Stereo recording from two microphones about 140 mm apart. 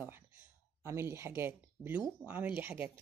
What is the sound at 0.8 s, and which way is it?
Speech, 20° right (ahead or behind).